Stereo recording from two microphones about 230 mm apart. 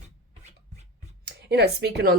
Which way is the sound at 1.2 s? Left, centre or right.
Right.